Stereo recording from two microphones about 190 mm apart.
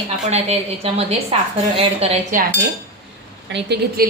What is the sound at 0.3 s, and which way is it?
A woman's voice, 35° right (ahead or behind).